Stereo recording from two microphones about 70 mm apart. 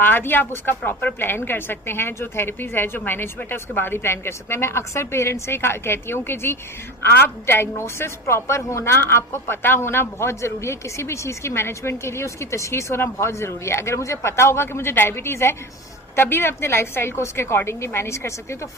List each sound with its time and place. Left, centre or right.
0.0 s a woman's voice: left